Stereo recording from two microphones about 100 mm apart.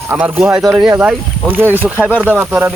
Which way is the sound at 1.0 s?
15° right (ahead or behind).